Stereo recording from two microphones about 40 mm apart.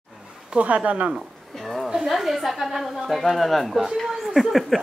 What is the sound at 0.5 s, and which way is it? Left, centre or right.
Speech, right.